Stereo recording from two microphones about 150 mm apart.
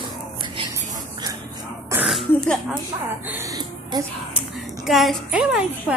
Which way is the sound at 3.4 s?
25° right (ahead or behind).